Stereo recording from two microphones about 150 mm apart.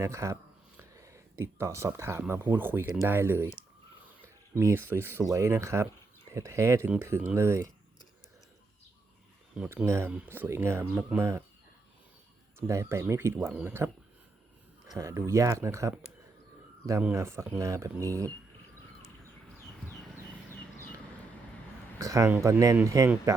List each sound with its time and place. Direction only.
0.0 s speech: 20° right (ahead or behind)
4.5 s speech: 15° right (ahead or behind)
9.6 s speech: 15° right (ahead or behind)
12.5 s speech: 20° right (ahead or behind)
17.2 s speech: 15° right (ahead or behind)
20.6 s a sound: 10° left (ahead or behind)
21.9 s a sound: 20° right (ahead or behind)
22.3 s speech: 20° right (ahead or behind)